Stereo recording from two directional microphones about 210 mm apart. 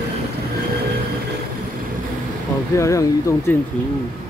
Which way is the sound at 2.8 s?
15° left (ahead or behind).